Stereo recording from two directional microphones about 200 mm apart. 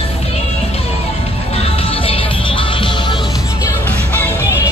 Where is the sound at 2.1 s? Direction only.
25° left (ahead or behind).